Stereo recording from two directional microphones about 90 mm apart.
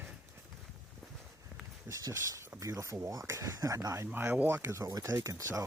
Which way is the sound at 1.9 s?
35° right (ahead or behind).